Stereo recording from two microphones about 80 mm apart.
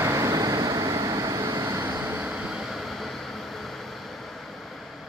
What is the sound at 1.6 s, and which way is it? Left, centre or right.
Vehicle, right.